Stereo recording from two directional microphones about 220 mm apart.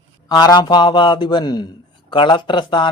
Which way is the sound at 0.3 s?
15° left (ahead or behind).